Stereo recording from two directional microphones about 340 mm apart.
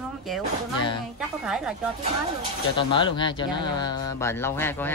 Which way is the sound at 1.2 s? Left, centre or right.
Centre.